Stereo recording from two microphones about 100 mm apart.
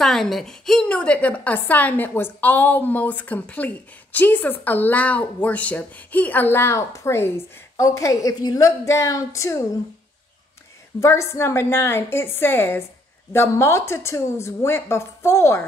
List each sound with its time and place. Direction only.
0.0 s a woman's voice: 5° left (ahead or behind); by 9.7 s 30° left (ahead or behind)
11.0 s a woman's voice: 30° left (ahead or behind)